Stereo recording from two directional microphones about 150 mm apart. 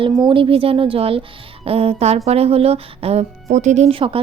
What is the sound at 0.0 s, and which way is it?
Speech, 35° right (ahead or behind).